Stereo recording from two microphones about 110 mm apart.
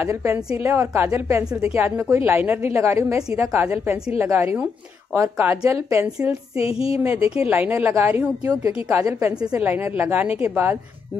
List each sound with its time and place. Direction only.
0.0 s a woman's voice: 25° right (ahead or behind)
6.5 s a sound: 60° left (ahead or behind)
7.3 s a woman's voice: 15° right (ahead or behind)
8.5 s a woman's voice: 35° right (ahead or behind)
8.9 s a woman's voice: 20° right (ahead or behind)
9.4 s a woman's voice: 10° right (ahead or behind)